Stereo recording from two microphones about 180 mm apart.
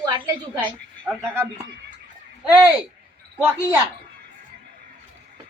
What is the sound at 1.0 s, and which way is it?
Speech, 5° left (ahead or behind).